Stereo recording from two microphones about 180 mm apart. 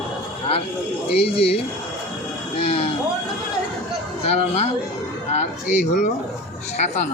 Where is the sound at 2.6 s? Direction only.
35° left (ahead or behind).